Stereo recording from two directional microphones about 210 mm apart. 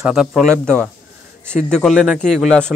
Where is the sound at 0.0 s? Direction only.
5° right (ahead or behind).